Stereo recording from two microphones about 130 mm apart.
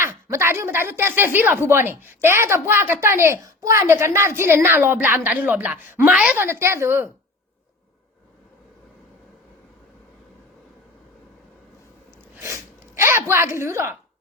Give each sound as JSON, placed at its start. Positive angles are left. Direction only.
{"t": 0.0, "sound": "a woman's voice", "side_deg": -20}
{"t": 6.4, "sound": "speech", "side_deg": -20}
{"t": 13.0, "sound": "speech", "side_deg": -20}